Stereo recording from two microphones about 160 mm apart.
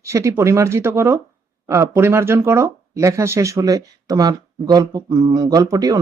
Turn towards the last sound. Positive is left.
turn(degrees=-25)  # may be behind; listen again after turning